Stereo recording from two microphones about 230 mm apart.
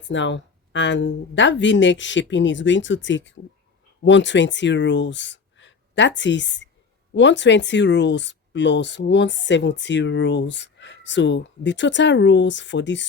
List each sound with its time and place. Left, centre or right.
0.1 s speech: left